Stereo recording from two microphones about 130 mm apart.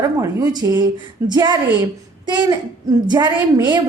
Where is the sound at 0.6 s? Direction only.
25° right (ahead or behind).